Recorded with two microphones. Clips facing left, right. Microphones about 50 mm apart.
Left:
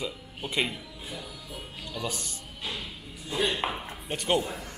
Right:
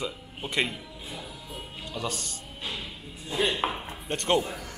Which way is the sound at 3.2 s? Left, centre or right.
Right.